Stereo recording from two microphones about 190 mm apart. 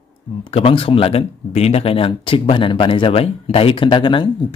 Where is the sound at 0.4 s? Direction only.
30° left (ahead or behind).